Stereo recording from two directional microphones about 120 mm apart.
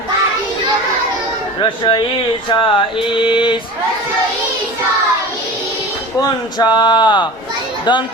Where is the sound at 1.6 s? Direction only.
40° left (ahead or behind).